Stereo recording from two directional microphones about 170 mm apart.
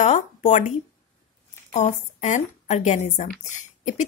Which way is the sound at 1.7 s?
45° left (ahead or behind).